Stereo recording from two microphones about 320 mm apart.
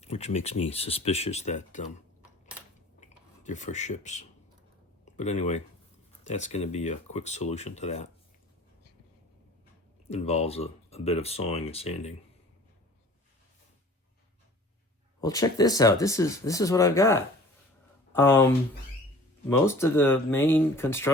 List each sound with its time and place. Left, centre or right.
0.0 s speech: centre
3.0 s speech: left
10.1 s speech: centre
15.2 s speech: centre